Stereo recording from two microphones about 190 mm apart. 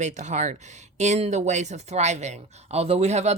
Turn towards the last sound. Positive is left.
turn(degrees=-35)  # may be behind; listen again after turning